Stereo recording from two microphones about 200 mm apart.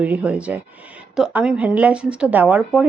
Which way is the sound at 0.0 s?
10° right (ahead or behind).